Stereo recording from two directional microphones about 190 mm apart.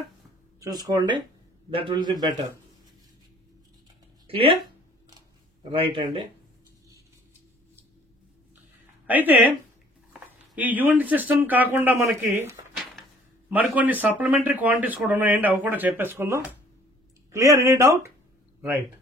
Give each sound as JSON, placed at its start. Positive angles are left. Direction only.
{"t": 0.6, "sound": "a man's voice", "side_deg": -20}
{"t": 5.6, "sound": "a man's voice", "side_deg": -30}
{"t": 9.0, "sound": "speech", "side_deg": -10}
{"t": 10.5, "sound": "speech", "side_deg": -10}